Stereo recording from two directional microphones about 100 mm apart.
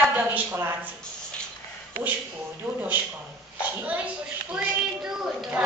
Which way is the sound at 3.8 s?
15° right (ahead or behind).